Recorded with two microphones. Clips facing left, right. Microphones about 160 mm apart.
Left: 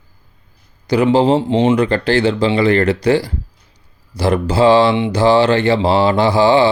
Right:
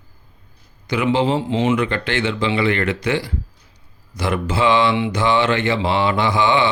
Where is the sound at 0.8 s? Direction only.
35° left (ahead or behind).